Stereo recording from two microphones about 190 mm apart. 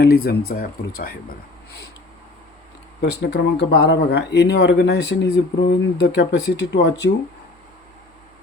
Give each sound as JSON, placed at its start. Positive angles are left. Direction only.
{"t": 0.0, "sound": "speech", "side_deg": 55}
{"t": 3.0, "sound": "speech", "side_deg": 60}